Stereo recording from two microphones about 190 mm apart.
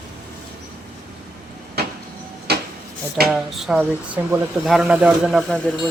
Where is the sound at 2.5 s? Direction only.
60° right (ahead or behind).